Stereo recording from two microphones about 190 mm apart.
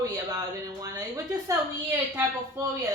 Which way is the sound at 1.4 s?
15° right (ahead or behind).